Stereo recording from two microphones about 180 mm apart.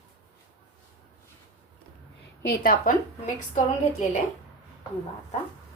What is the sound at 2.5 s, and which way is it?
Speech, 50° left (ahead or behind).